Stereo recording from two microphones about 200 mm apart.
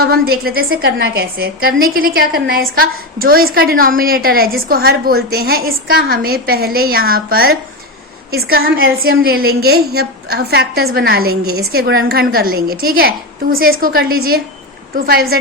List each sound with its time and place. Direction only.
0.0 s a woman's voice: 50° right (ahead or behind)